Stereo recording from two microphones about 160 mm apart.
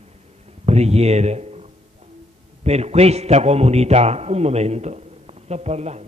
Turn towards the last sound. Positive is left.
turn(degrees=-40)  # may be behind; listen again after turning